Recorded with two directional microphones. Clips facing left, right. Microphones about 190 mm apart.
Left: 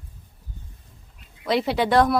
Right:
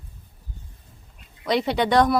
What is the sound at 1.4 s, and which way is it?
Speech, centre (ahead or behind).